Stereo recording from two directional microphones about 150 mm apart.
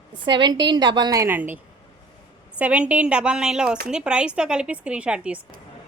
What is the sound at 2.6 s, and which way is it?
Speech, 5° right (ahead or behind).